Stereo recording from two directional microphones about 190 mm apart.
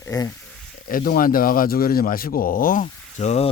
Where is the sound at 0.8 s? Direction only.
50° left (ahead or behind).